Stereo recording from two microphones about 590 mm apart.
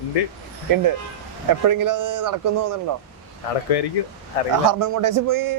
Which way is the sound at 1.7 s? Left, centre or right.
Right.